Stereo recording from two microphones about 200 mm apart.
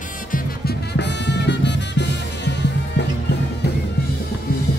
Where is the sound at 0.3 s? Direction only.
55° left (ahead or behind).